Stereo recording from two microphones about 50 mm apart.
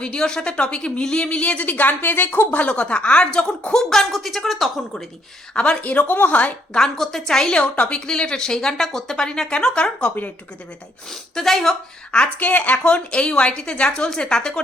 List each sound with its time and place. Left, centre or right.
0.0 s a woman's voice: centre
3.8 s a woman's voice: centre
5.5 s speech: left
6.7 s a woman's voice: centre
7.6 s a woman's voice: left
11.1 s a woman's voice: centre
12.4 s speech: left
12.7 s a woman's voice: left